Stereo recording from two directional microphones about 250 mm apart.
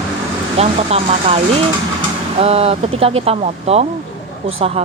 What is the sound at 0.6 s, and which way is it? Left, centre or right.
A woman's voice, right.